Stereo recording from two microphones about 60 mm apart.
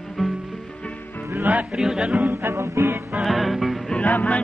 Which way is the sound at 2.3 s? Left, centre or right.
Right.